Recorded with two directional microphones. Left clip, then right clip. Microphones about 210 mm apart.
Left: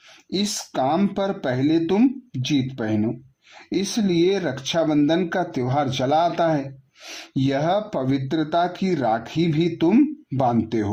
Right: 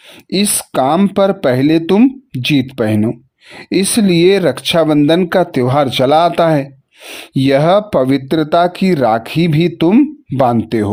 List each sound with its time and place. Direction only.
0.3 s speech: 45° right (ahead or behind)